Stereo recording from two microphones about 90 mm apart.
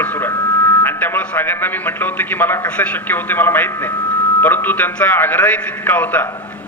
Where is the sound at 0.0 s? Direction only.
20° left (ahead or behind).